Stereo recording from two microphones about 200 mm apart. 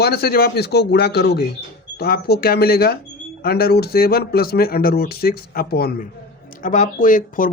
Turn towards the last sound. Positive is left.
turn(degrees=40)  # may be behind; listen again after turning